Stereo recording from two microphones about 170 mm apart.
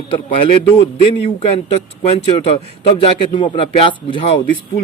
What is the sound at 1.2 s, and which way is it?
Speech, 35° left (ahead or behind).